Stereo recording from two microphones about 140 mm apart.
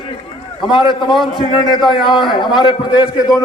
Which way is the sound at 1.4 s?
35° left (ahead or behind).